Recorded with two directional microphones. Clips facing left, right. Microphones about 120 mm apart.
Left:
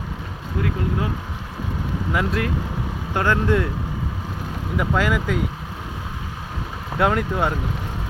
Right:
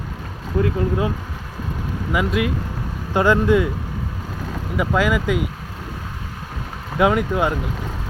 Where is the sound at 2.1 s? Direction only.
5° right (ahead or behind).